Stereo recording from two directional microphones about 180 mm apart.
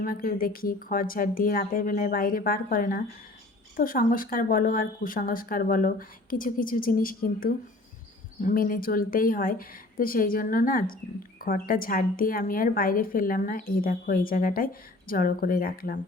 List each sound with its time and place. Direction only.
0.0 s a woman's voice: 50° left (ahead or behind)